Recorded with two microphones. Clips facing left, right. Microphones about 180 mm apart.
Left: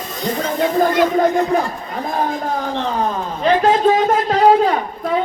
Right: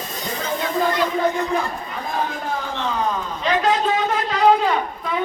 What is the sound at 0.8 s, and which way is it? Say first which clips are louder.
Speech: left 5 dB; 45° left (ahead or behind).